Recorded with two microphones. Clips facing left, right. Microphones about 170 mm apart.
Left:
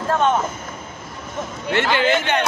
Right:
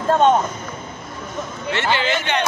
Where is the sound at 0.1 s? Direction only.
30° right (ahead or behind).